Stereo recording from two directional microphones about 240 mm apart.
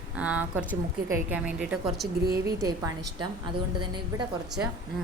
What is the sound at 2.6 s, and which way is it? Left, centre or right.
Speech, centre.